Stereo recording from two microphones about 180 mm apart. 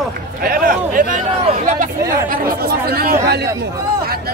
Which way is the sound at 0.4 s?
55° right (ahead or behind).